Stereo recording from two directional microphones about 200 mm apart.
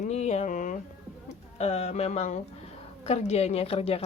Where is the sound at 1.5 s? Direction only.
30° left (ahead or behind).